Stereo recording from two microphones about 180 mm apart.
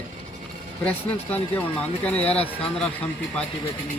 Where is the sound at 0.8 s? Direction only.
10° left (ahead or behind).